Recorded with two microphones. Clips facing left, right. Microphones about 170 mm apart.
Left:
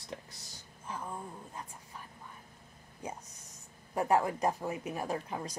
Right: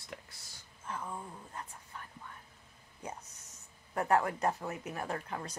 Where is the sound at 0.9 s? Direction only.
15° left (ahead or behind).